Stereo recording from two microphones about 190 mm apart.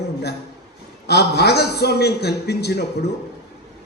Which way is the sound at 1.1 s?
60° left (ahead or behind).